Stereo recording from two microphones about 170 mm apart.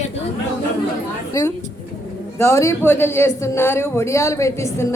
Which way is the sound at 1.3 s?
20° left (ahead or behind).